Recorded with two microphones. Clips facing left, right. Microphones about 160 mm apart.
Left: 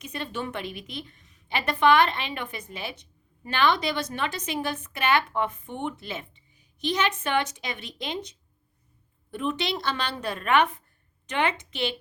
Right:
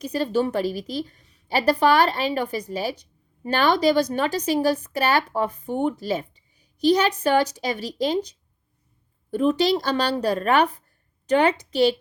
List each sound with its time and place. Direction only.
0.0 s a woman's voice: 35° right (ahead or behind)